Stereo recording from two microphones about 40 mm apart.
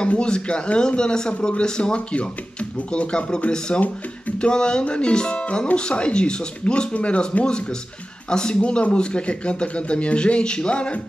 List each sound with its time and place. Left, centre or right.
0.0 s speech: left